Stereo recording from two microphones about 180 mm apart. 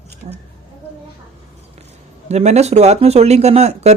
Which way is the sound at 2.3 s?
40° right (ahead or behind).